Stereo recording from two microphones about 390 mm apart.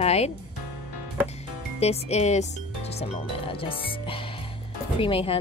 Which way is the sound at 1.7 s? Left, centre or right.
Centre.